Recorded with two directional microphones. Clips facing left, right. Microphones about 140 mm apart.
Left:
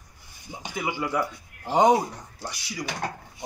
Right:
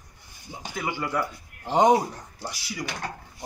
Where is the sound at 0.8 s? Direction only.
15° left (ahead or behind).